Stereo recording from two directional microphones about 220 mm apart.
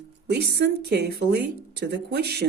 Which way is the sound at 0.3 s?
50° right (ahead or behind).